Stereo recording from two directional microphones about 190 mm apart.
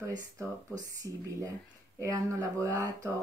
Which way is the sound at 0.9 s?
20° right (ahead or behind).